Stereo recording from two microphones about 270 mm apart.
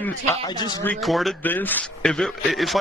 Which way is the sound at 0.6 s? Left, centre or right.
Centre.